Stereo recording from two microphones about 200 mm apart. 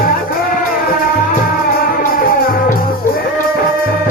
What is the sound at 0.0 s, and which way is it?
Music, 45° left (ahead or behind).